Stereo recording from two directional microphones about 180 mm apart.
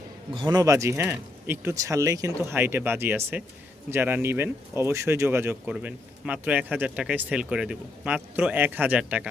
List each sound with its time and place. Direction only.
0.3 s speech: 25° right (ahead or behind); by 9.3 s 5° right (ahead or behind)